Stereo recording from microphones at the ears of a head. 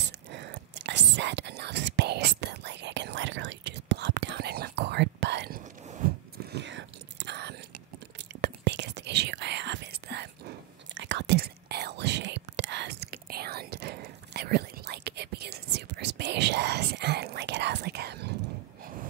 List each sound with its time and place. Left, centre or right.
0.0 s whispering: right